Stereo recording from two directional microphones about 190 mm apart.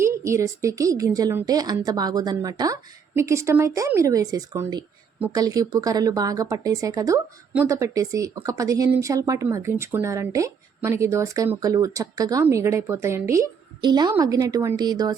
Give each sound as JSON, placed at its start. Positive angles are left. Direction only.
{"t": 0.0, "sound": "a woman's voice", "side_deg": -15}